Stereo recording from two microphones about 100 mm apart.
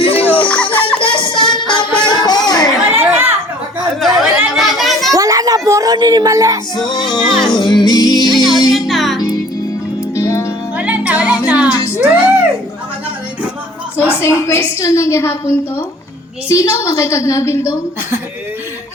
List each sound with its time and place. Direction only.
0.0 s a sound: 70° left (ahead or behind)
0.3 s a sound: 10° left (ahead or behind)
1.1 s music: 55° left (ahead or behind)
2.9 s chatter: 20° right (ahead or behind)
4.0 s chatter: centre (ahead or behind)
5.1 s a sound: 35° right (ahead or behind)
6.7 s music: 45° left (ahead or behind)
8.7 s music: centre (ahead or behind)
10.2 s music: 30° left (ahead or behind)
10.8 s music: 15° right (ahead or behind)
11.9 s a sound: 15° right (ahead or behind)
14.0 s a woman's voice: 25° left (ahead or behind)